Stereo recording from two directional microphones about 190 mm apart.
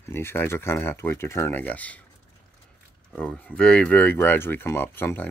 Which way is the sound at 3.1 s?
5° left (ahead or behind).